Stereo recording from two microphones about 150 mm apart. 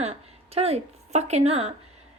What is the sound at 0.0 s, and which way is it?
A woman's voice, 40° right (ahead or behind).